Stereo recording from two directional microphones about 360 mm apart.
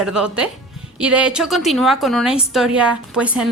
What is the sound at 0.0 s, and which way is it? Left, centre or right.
A woman's voice, centre.